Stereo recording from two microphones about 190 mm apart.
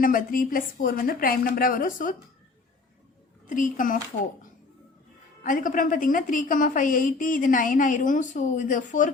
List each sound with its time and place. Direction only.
0.0 s a woman's voice: 45° left (ahead or behind)
3.4 s a woman's voice: 45° left (ahead or behind)
5.4 s a woman's voice: 45° left (ahead or behind)